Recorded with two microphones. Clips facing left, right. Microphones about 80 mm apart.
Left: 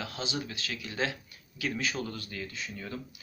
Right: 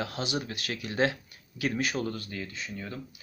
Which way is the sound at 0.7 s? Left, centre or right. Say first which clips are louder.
Right 6 dB; right.